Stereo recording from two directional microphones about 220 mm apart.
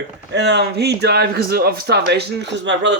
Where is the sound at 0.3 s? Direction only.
50° right (ahead or behind).